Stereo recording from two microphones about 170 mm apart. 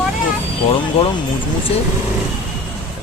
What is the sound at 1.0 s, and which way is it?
Speech, 35° left (ahead or behind).